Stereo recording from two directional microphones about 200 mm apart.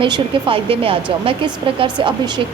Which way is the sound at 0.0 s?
25° right (ahead or behind).